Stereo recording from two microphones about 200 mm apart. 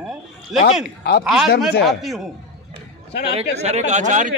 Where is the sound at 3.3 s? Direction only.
35° right (ahead or behind).